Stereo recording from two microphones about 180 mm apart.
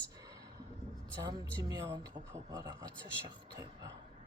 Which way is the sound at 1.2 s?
25° right (ahead or behind).